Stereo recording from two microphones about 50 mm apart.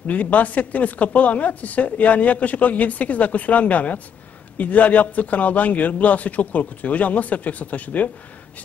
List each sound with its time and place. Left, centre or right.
0.0 s speech: left